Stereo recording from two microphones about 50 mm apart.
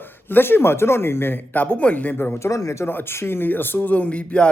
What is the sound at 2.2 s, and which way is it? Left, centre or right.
Speech, left.